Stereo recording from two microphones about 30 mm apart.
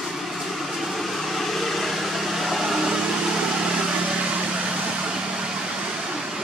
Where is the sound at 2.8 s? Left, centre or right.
Centre.